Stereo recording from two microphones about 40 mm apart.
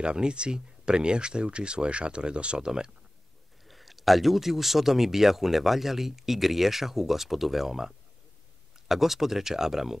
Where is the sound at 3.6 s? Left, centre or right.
Centre.